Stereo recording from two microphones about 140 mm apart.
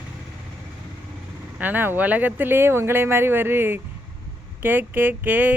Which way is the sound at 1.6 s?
15° right (ahead or behind).